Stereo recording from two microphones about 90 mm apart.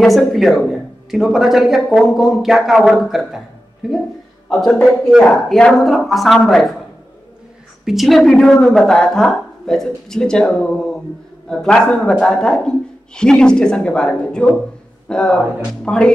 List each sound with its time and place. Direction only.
0.0 s speech: centre (ahead or behind)
7.8 s a woman's voice: 5° right (ahead or behind)